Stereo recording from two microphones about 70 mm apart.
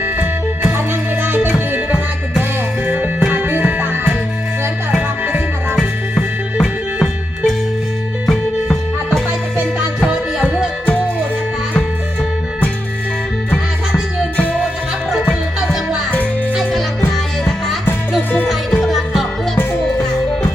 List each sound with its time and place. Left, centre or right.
0.0 s music: right
2.8 s music: right
5.7 s music: centre
15.3 s music: centre
17.1 s music: centre